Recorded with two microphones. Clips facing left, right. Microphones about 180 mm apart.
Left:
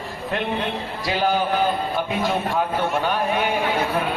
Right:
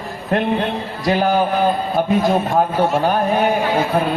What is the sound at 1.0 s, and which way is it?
A man's voice, 50° right (ahead or behind).